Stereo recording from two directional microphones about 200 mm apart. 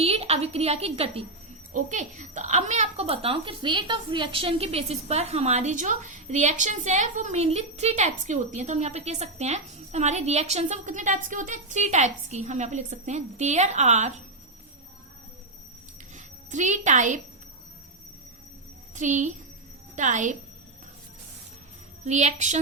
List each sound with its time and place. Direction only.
0.0 s a woman's voice: 30° right (ahead or behind)
16.1 s a child's voice: 40° right (ahead or behind)
18.9 s a child's voice: 40° right (ahead or behind)
22.0 s a child's voice: 35° right (ahead or behind)